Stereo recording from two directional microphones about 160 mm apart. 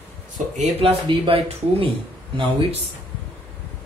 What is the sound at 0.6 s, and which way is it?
Speech, 40° right (ahead or behind).